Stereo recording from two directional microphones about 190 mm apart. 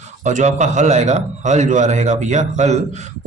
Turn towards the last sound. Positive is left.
turn(degrees=-35)  # may be behind; listen again after turning